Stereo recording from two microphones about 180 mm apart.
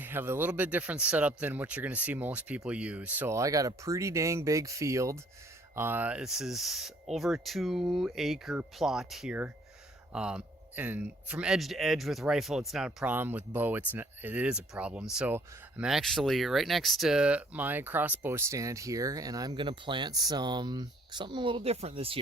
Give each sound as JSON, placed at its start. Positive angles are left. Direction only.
{"t": 0.0, "sound": "speech", "side_deg": -10}